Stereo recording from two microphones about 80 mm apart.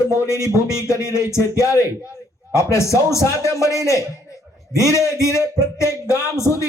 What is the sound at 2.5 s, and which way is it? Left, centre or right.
Speech, left.